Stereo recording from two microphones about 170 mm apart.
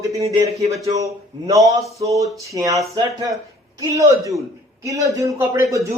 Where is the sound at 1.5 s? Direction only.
20° right (ahead or behind).